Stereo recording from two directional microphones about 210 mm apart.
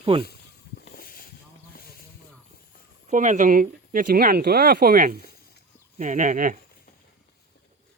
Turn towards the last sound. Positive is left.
turn(degrees=-40)  # may be behind; listen again after turning